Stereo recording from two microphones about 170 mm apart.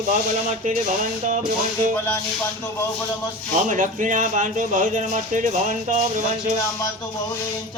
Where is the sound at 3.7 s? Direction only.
50° right (ahead or behind).